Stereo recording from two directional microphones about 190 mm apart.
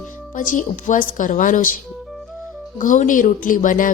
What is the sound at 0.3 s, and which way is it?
A woman's voice, 45° left (ahead or behind).